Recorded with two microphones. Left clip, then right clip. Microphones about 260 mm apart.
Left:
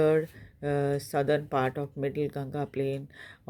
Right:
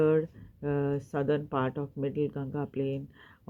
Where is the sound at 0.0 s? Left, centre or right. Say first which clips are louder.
Left 1 dB; left.